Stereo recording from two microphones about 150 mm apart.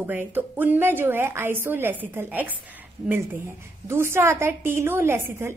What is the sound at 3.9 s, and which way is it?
A woman's voice, 15° right (ahead or behind).